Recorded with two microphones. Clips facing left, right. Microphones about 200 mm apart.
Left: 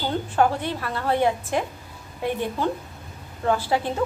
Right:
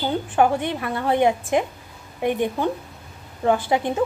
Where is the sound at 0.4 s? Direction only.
15° right (ahead or behind).